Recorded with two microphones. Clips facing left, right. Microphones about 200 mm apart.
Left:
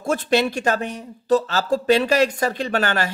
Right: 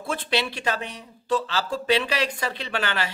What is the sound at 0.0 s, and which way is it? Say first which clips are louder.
Speech: left 7 dB; 45° left (ahead or behind).